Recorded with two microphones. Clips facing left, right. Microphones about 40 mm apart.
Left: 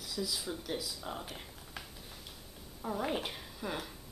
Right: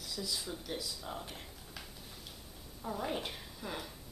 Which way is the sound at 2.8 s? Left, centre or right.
Centre.